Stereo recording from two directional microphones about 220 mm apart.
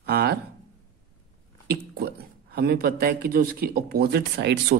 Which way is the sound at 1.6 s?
45° right (ahead or behind).